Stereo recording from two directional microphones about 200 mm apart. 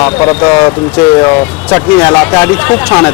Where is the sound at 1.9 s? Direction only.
5° left (ahead or behind).